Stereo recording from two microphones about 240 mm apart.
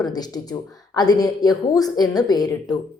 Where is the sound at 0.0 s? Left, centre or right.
Centre.